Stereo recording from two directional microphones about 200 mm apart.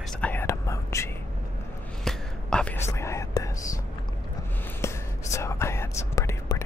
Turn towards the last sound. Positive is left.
turn(degrees=15)  # may be behind; listen again after turning